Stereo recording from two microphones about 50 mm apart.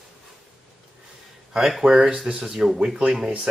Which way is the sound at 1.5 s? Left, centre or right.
Centre.